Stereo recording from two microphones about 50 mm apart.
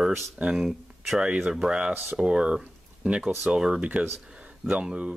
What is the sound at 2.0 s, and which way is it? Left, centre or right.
Speech, centre.